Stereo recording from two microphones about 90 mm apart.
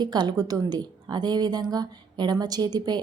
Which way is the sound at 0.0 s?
55° right (ahead or behind).